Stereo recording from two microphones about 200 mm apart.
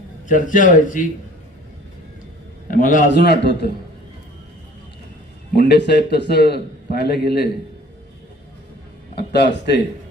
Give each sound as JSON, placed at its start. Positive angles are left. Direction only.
{"t": 0.3, "sound": "a man's voice", "side_deg": 40}
{"t": 2.7, "sound": "a man's voice", "side_deg": 40}
{"t": 5.6, "sound": "a man's voice", "side_deg": 55}
{"t": 9.3, "sound": "a man's voice", "side_deg": 60}